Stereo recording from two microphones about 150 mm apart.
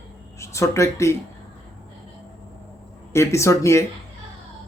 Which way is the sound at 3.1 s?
20° left (ahead or behind).